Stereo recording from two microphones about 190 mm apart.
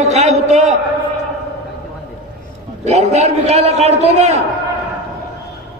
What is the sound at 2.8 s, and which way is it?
A man's voice, 35° right (ahead or behind).